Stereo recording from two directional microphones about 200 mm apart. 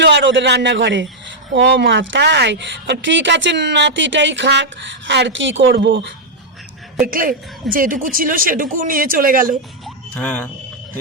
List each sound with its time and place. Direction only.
0.0 s speech: 60° right (ahead or behind)
7.1 s speech: 45° right (ahead or behind)
9.8 s a sound: 5° left (ahead or behind)